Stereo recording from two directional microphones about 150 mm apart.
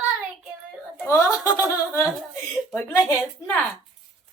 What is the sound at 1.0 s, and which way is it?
Speech, 20° left (ahead or behind).